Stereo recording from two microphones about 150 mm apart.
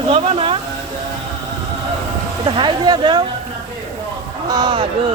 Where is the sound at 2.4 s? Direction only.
30° right (ahead or behind).